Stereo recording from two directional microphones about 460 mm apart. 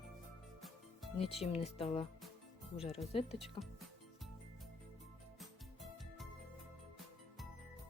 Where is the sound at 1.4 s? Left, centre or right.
Centre.